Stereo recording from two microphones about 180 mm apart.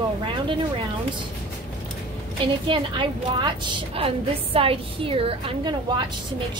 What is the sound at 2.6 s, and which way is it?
A woman's voice, 25° right (ahead or behind).